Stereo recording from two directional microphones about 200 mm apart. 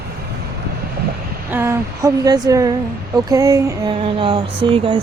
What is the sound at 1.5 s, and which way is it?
Speech, 10° right (ahead or behind).